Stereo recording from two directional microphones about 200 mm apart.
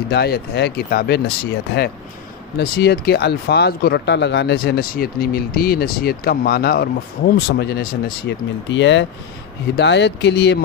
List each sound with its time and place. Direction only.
0.1 s speech: 55° left (ahead or behind)
2.5 s speech: 55° left (ahead or behind)